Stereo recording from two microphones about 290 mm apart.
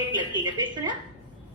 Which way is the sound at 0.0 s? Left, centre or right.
Centre.